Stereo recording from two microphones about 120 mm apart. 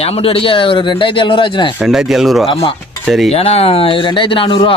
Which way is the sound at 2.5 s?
45° left (ahead or behind).